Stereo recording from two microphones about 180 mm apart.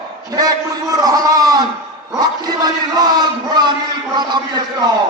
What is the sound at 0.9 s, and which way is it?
A man's voice, 20° right (ahead or behind).